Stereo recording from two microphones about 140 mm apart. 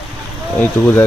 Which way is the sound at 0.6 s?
10° left (ahead or behind).